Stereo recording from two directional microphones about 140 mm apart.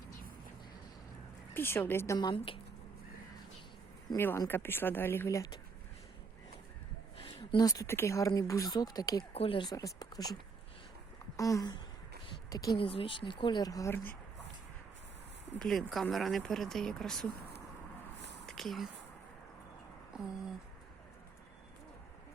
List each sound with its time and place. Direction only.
1.5 s speech: 15° left (ahead or behind)
2.1 s speech: 35° left (ahead or behind)
4.2 s speech: 15° left (ahead or behind)
7.3 s speech: 30° left (ahead or behind)
9.3 s speech: 40° left (ahead or behind); by 10.2 s 25° left (ahead or behind)
11.3 s speech: 25° left (ahead or behind)
12.7 s speech: 40° left (ahead or behind)
13.9 s speech: 15° left (ahead or behind)
15.5 s speech: centre (ahead or behind)
18.4 s a sound: centre (ahead or behind)